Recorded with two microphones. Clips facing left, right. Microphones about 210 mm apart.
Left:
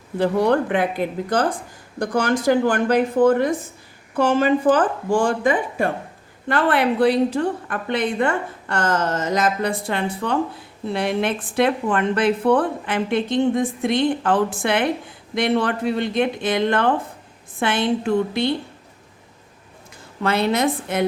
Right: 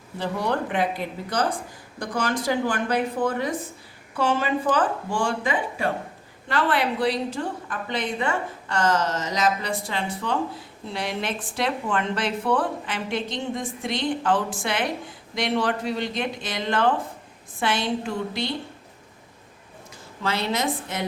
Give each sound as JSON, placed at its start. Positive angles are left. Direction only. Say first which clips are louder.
{"t": 0.2, "sound": "a woman's voice", "louder": "left 8 dB", "side_deg": 55}
{"t": 20.2, "sound": "a woman's voice", "louder": "left 6 dB", "side_deg": 55}